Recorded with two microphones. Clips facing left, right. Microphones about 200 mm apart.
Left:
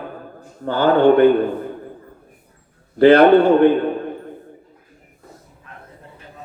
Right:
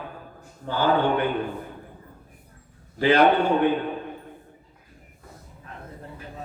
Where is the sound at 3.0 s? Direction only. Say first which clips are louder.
Left 9 dB; 55° left (ahead or behind).